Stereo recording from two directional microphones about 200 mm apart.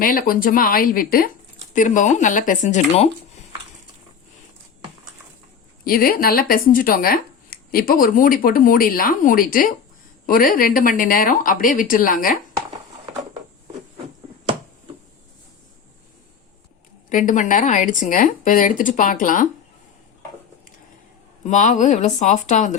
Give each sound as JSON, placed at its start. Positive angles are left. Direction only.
{"t": 0.0, "sound": "a woman's voice", "side_deg": 45}
{"t": 5.8, "sound": "speech", "side_deg": 45}
{"t": 17.1, "sound": "a woman's voice", "side_deg": 40}
{"t": 21.4, "sound": "a woman's voice", "side_deg": 40}